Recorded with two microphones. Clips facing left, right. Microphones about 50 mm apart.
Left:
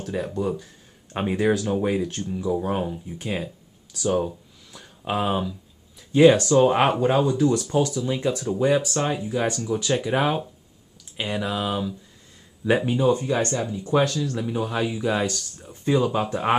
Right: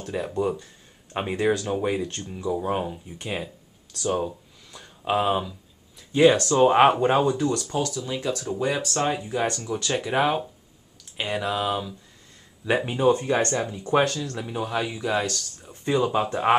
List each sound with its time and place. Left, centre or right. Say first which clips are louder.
0.0 s speech: even; centre
6.6 s speech: right 2 dB; centre
7.3 s speech: left 4 dB; centre
8.9 s speech: even; centre
12.6 s speech: left 3 dB; centre
13.1 s speech: even; right
14.0 s speech: left 3 dB; centre
15.1 s speech: left 1 dB; centre
15.6 s speech: left 2 dB; centre